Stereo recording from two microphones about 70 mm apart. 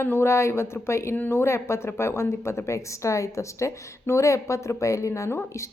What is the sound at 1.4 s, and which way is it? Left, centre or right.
A woman's voice, left.